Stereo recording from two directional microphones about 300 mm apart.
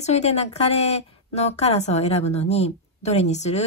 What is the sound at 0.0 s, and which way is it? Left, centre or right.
A woman's voice, left.